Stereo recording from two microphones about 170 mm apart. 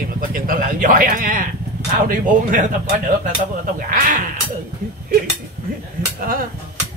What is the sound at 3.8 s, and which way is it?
Speech, 50° right (ahead or behind).